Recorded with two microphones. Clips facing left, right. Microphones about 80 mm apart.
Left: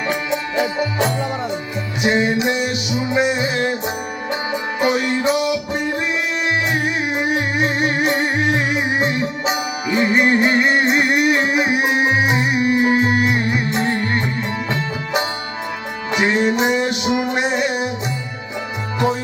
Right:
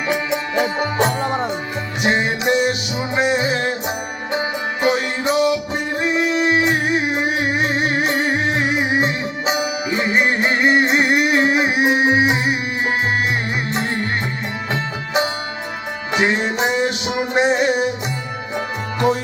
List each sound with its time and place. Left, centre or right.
0.5 s music: right
14.7 s music: right